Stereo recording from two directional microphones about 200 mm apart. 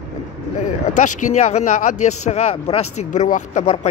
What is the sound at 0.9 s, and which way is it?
Speech, 40° left (ahead or behind).